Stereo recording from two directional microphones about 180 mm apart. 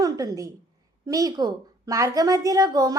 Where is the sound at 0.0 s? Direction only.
20° right (ahead or behind).